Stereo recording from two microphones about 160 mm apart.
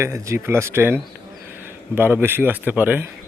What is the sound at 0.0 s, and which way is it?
A man's voice, 15° right (ahead or behind).